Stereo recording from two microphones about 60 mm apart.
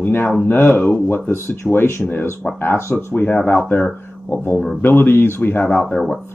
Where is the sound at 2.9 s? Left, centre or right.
Left.